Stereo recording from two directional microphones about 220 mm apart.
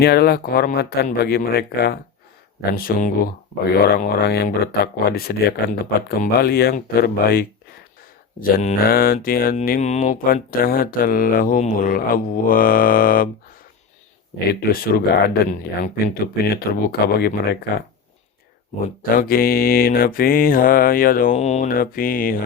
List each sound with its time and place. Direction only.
0.0 s speech: 45° left (ahead or behind)
2.7 s mantra: 40° left (ahead or behind)
3.8 s speech: 45° left (ahead or behind)
8.4 s mantra: 40° left (ahead or behind)
14.6 s speech: 45° left (ahead or behind)
19.1 s mantra: 40° left (ahead or behind)